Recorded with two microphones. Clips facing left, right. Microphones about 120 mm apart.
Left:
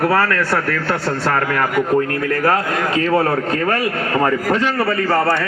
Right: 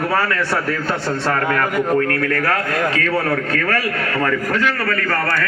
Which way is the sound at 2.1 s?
20° left (ahead or behind).